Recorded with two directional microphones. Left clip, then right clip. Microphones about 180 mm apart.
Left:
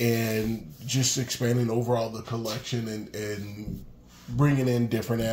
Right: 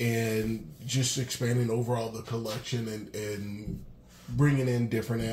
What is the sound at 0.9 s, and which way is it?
Speech, 30° left (ahead or behind).